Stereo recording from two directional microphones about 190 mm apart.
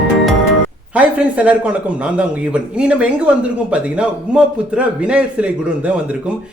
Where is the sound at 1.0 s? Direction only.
5° right (ahead or behind).